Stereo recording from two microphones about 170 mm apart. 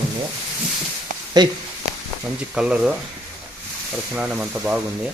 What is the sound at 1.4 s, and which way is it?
Speech, 25° right (ahead or behind).